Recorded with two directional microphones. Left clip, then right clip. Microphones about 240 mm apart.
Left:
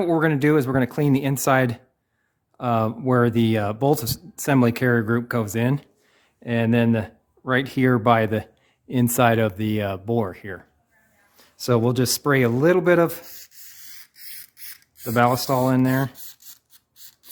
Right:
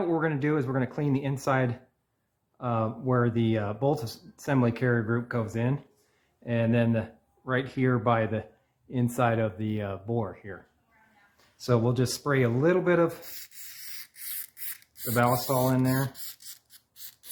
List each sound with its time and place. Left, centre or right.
0.0 s speech: left
13.2 s rub: centre
15.1 s speech: left
17.0 s a sound: centre